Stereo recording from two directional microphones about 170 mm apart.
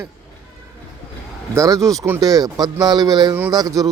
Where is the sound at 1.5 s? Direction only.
20° right (ahead or behind).